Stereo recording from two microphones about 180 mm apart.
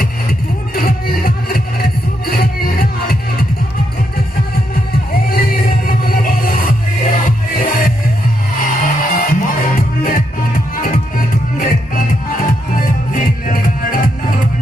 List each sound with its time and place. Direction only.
0.0 s music: 55° left (ahead or behind)
5.3 s music: 55° left (ahead or behind)